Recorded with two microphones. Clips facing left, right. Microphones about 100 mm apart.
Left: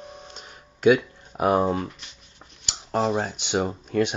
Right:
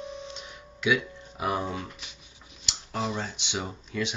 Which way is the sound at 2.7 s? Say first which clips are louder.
Left 8 dB; 55° left (ahead or behind).